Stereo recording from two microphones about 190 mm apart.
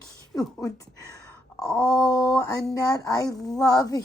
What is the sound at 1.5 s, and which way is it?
Wail, 5° left (ahead or behind).